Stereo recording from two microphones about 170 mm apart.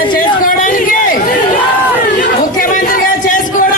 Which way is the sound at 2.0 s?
55° left (ahead or behind).